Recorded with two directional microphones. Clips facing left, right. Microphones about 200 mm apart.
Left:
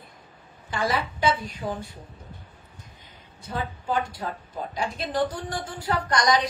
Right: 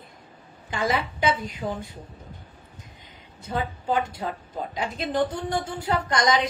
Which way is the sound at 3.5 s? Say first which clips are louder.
Right 2 dB; 25° right (ahead or behind).